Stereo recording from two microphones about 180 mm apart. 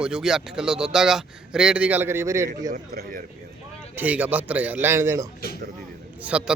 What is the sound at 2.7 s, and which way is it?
Speech, 55° right (ahead or behind).